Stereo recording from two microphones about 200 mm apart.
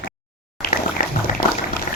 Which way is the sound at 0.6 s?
40° left (ahead or behind).